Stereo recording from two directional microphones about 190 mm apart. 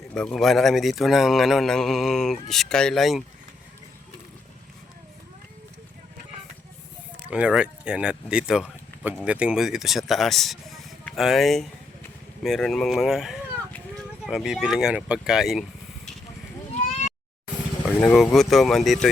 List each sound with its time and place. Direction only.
0.1 s speech: 5° left (ahead or behind)
7.2 s speech: 5° right (ahead or behind)
16.7 s sheep: 35° left (ahead or behind)
17.8 s speech: centre (ahead or behind)